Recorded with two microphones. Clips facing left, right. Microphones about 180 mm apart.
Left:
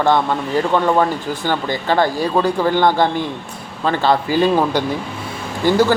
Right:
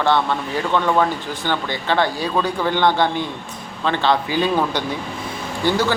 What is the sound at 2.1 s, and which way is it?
Speech, 45° left (ahead or behind).